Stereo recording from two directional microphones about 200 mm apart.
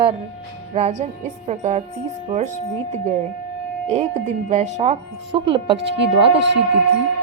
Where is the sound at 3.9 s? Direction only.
35° right (ahead or behind).